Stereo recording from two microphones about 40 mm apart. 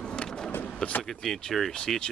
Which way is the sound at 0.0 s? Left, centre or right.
Left.